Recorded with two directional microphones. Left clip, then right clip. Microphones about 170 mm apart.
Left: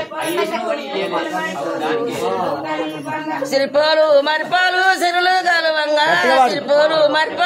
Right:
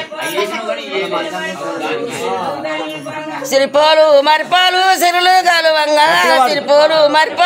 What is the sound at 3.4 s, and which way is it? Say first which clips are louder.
Speech: right 5 dB; 25° right (ahead or behind).